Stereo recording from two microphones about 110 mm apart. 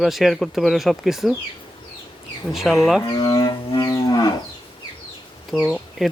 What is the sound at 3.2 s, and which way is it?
Livestock, 40° left (ahead or behind).